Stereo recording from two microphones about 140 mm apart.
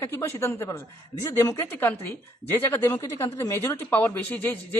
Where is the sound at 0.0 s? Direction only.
15° left (ahead or behind).